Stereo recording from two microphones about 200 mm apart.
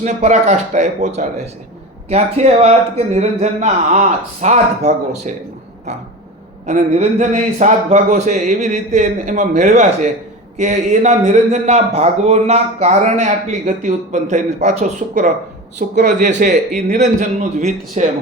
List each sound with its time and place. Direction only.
0.0 s a man's voice: 35° right (ahead or behind)
6.7 s a man's voice: 35° right (ahead or behind)